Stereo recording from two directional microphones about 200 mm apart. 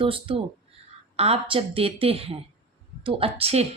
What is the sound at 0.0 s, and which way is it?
A woman's voice, 25° right (ahead or behind).